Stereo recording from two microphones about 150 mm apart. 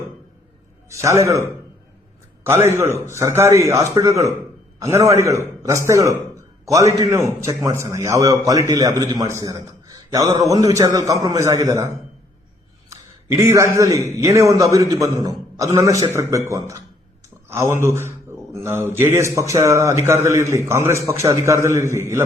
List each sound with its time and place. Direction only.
0.9 s a man's voice: 20° right (ahead or behind)
2.4 s a man's voice: 15° right (ahead or behind)
13.4 s a man's voice: 15° right (ahead or behind)
17.8 s a man's voice: 15° right (ahead or behind)